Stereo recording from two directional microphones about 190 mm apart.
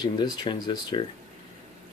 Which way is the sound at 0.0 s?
20° left (ahead or behind).